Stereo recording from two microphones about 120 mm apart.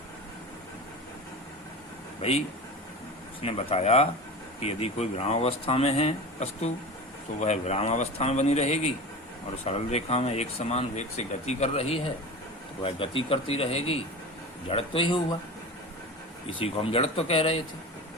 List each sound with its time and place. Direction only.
3.4 s a man's voice: 55° left (ahead or behind)
16.6 s speech: 50° left (ahead or behind)